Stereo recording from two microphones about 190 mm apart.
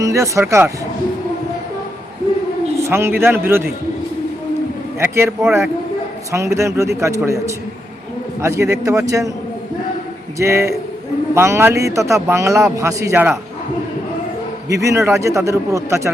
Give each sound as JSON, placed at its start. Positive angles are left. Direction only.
{"t": 0.0, "sound": "speech", "side_deg": -15}
{"t": 2.8, "sound": "speech", "side_deg": -15}
{"t": 4.9, "sound": "speech", "side_deg": -10}
{"t": 10.3, "sound": "speech", "side_deg": -15}
{"t": 14.7, "sound": "speech", "side_deg": -15}